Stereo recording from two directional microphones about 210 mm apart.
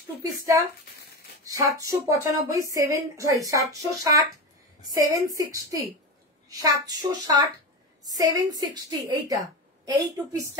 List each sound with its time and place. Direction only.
1.4 s a woman's voice: 15° right (ahead or behind)